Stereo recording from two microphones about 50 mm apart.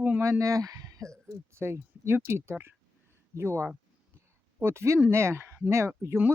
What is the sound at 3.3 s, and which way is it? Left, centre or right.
Speech, right.